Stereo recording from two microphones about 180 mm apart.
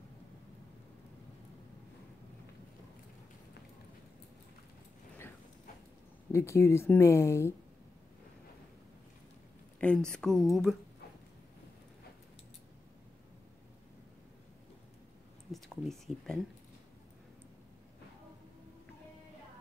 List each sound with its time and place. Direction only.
6.3 s speech: 15° left (ahead or behind)
9.8 s speech: 5° left (ahead or behind)
15.5 s a sound: centre (ahead or behind)